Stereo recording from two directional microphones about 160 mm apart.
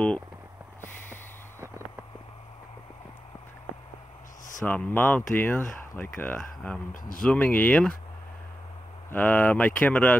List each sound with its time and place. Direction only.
0.7 s a sound: 15° left (ahead or behind)
4.6 s speech: 10° left (ahead or behind)
6.9 s speech: 60° left (ahead or behind)
7.2 s speech: 10° left (ahead or behind)
9.1 s speech: 10° left (ahead or behind)